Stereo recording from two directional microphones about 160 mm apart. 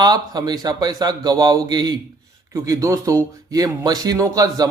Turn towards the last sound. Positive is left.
turn(degrees=-20)  # may be behind; listen again after turning